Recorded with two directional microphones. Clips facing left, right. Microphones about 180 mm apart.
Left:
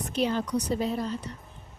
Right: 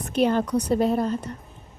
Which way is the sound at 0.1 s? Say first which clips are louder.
Right 6 dB; 55° right (ahead or behind).